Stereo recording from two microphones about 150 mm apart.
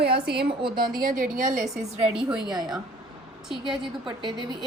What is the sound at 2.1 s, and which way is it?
Speech, 5° right (ahead or behind).